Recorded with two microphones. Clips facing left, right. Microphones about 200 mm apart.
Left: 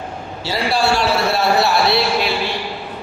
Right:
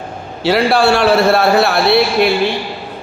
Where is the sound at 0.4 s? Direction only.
60° right (ahead or behind).